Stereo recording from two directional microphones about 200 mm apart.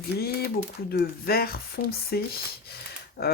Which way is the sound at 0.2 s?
50° left (ahead or behind).